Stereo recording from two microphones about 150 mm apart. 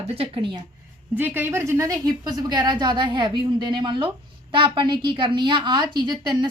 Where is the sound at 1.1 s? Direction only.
10° right (ahead or behind).